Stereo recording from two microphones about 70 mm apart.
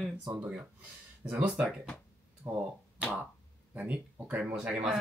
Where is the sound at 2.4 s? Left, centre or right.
Right.